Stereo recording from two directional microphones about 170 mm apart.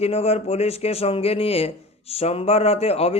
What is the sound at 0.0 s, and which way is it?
A man's voice, 35° left (ahead or behind).